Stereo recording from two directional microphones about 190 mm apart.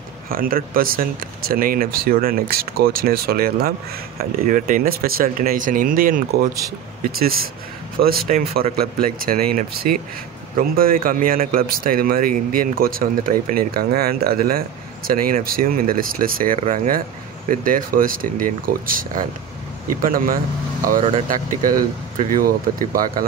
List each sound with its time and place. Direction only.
0.3 s speech: 50° right (ahead or behind)
8.0 s speech: 50° right (ahead or behind)